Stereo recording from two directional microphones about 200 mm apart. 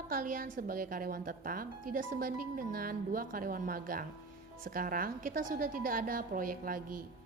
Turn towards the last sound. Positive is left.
turn(degrees=-45)  # may be behind; listen again after turning